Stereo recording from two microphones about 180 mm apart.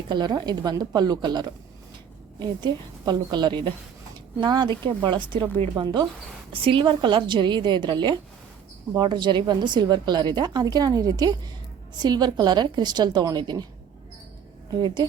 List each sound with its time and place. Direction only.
0.1 s a woman's voice: 25° right (ahead or behind)
14.7 s a woman's voice: 25° right (ahead or behind)